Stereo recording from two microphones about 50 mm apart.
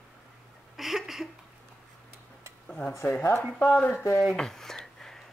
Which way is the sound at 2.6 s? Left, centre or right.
Centre.